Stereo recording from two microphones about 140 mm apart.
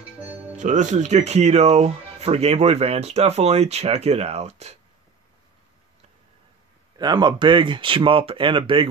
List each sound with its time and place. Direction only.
0.6 s speech: 60° right (ahead or behind)
7.0 s speech: 30° right (ahead or behind)